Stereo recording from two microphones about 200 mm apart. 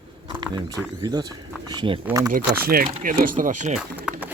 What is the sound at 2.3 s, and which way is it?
Speech, 45° right (ahead or behind).